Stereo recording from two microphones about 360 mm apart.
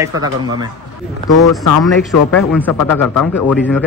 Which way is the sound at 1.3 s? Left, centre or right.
Left.